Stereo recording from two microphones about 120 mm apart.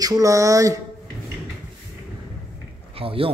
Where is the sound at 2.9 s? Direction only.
50° right (ahead or behind).